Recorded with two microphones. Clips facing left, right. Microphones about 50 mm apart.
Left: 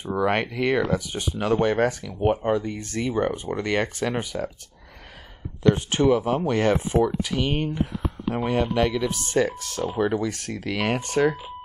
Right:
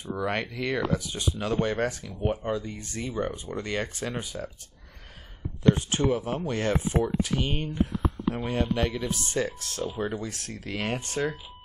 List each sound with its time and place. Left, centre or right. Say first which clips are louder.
0.0 s speech: left 6 dB; left
2.5 s speech: left 7 dB; left
4.3 s speech: left 7 dB; left
5.6 s speech: left 3 dB; left